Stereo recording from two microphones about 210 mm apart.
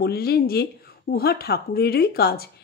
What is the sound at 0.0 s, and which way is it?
Speech, 50° left (ahead or behind).